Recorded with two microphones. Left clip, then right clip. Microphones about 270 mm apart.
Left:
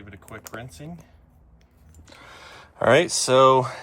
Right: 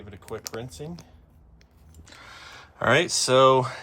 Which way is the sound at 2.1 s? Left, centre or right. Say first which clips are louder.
Even; centre.